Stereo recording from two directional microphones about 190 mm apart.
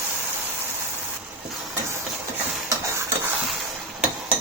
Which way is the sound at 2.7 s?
15° right (ahead or behind).